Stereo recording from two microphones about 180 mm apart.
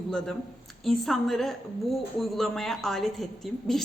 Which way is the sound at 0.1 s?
5° left (ahead or behind).